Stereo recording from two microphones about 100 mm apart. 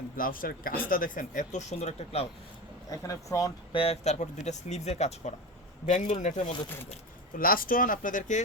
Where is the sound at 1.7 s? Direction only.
90° left.